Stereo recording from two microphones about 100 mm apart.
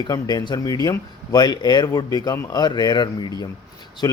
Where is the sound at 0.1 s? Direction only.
45° left (ahead or behind).